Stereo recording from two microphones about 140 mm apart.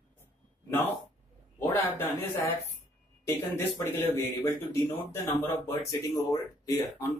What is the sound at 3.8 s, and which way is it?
Speech, 20° left (ahead or behind).